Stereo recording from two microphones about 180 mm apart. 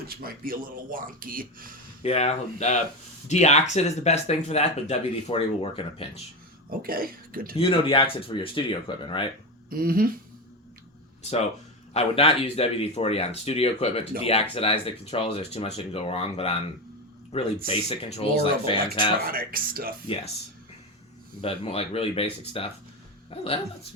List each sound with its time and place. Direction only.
0.1 s speech: 55° right (ahead or behind)
2.0 s speech: 35° left (ahead or behind)
6.7 s speech: 55° right (ahead or behind)
7.5 s speech: 30° left (ahead or behind)
9.6 s speech: 55° right (ahead or behind)
11.2 s speech: 40° left (ahead or behind)
19.2 s speech: 55° right (ahead or behind)
21.4 s speech: 35° left (ahead or behind)